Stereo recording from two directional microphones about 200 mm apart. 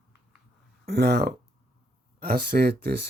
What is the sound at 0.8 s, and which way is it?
Speech, 50° right (ahead or behind).